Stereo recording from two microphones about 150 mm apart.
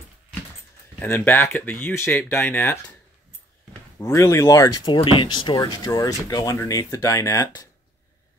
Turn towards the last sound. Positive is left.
turn(degrees=20)  # may be behind; listen again after turning